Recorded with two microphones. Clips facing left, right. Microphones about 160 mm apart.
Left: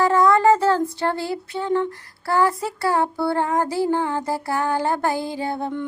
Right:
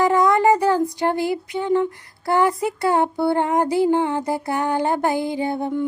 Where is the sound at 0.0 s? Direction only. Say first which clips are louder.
Even; 15° right (ahead or behind).